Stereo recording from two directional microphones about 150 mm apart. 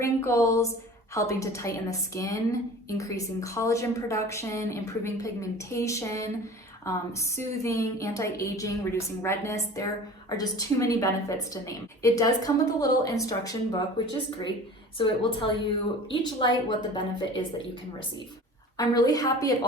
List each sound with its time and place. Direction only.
0.0 s a woman's voice: 20° left (ahead or behind)
18.8 s a woman's voice: 25° left (ahead or behind)